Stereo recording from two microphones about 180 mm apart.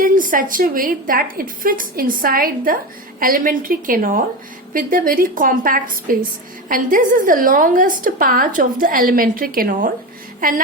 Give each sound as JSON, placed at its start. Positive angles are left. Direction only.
{"t": 0.0, "sound": "a woman's voice", "side_deg": -50}